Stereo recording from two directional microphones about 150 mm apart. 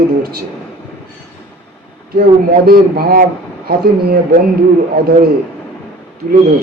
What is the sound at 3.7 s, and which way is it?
Speech, 90° right.